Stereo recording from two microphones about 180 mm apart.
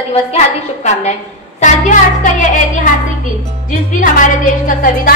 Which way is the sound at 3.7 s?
45° left (ahead or behind).